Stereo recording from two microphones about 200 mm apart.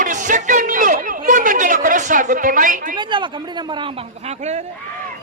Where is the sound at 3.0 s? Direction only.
25° right (ahead or behind).